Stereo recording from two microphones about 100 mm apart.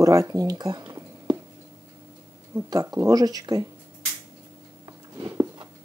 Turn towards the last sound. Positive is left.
turn(degrees=-35)  # may be behind; listen again after turning